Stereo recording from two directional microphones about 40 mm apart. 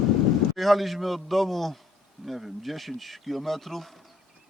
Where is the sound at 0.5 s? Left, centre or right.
Centre.